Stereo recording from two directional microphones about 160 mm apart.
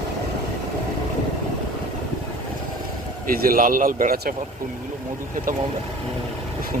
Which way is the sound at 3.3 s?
65° right (ahead or behind).